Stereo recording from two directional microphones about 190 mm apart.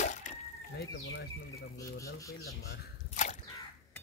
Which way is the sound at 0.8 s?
65° left (ahead or behind).